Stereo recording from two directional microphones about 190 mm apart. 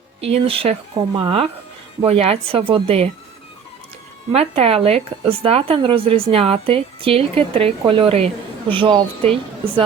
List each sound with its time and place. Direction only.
0.2 s speech: 30° right (ahead or behind)
4.3 s speech: 30° right (ahead or behind)